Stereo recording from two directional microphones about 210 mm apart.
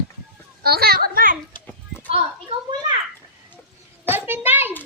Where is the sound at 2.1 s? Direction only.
25° right (ahead or behind).